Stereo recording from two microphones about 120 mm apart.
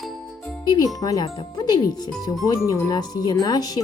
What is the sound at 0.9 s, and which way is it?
Speech, 30° left (ahead or behind).